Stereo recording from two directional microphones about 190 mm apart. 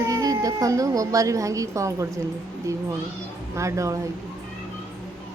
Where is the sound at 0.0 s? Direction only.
15° right (ahead or behind).